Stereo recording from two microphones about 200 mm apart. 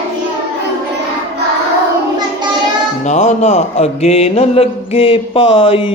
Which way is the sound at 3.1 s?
35° left (ahead or behind).